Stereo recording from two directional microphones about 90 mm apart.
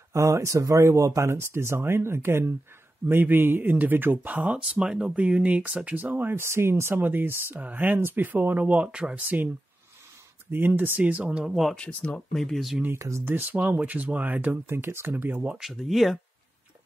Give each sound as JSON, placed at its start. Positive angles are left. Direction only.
{"t": 0.1, "sound": "speech", "side_deg": -35}
{"t": 4.6, "sound": "speech", "side_deg": -5}
{"t": 10.5, "sound": "speech", "side_deg": -20}
{"t": 11.7, "sound": "speech", "side_deg": 10}
{"t": 13.2, "sound": "speech", "side_deg": -20}
{"t": 15.5, "sound": "speech", "side_deg": 0}